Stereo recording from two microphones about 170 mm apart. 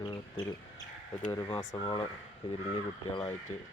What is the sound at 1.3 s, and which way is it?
Speech, 20° left (ahead or behind).